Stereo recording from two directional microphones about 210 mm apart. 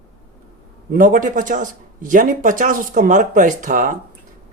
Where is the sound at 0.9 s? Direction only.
40° right (ahead or behind).